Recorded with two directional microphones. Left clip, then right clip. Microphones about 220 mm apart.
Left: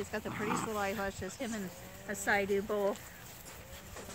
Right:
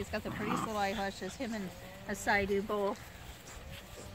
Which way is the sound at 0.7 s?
45° right (ahead or behind).